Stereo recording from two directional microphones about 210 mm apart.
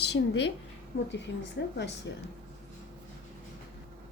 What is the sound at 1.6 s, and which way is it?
Speech, 55° left (ahead or behind).